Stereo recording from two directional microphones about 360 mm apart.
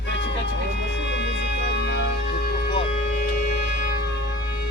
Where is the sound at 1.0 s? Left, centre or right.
Left.